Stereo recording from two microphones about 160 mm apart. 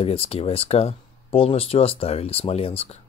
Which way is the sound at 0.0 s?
40° left (ahead or behind).